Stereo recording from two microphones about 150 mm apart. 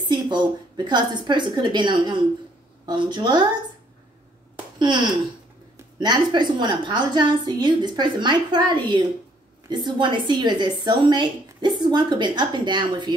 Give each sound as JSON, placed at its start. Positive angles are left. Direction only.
{"t": 0.1, "sound": "a woman's voice", "side_deg": -30}
{"t": 4.7, "sound": "a woman's voice", "side_deg": -30}